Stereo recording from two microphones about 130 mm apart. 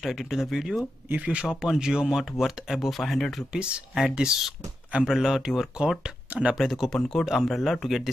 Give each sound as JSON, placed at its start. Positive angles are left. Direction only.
{"t": 0.0, "sound": "speech", "side_deg": 0}